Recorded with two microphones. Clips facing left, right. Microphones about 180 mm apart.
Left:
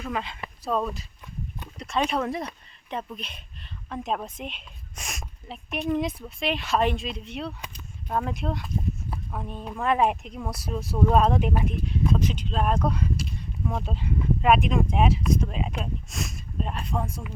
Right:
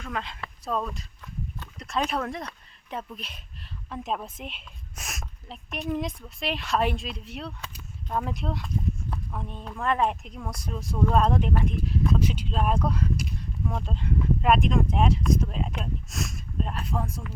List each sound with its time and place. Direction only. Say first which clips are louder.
0.0 s speech: left 3 dB; 5° left (ahead or behind)
11.9 s speech: left 1 dB; centre (ahead or behind)